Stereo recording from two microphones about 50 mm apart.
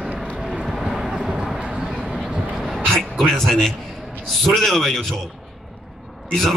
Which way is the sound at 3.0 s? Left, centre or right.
Centre.